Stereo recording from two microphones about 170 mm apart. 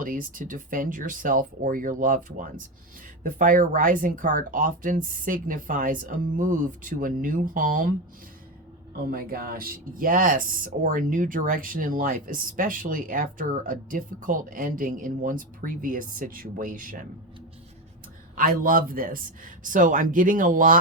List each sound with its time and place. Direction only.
0.0 s speech: 55° right (ahead or behind)
9.0 s speech: 60° right (ahead or behind)
18.3 s speech: 55° right (ahead or behind)